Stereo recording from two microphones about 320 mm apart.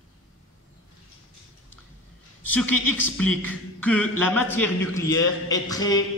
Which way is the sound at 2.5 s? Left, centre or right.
Centre.